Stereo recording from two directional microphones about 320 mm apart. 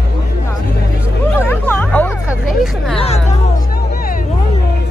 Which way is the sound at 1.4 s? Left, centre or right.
Centre.